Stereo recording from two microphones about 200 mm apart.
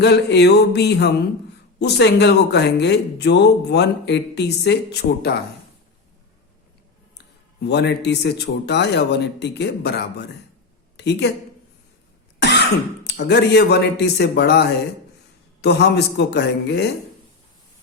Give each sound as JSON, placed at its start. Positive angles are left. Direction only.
{"t": 0.0, "sound": "speech", "side_deg": 55}
{"t": 7.6, "sound": "a woman's voice", "side_deg": 55}
{"t": 13.1, "sound": "speech", "side_deg": 55}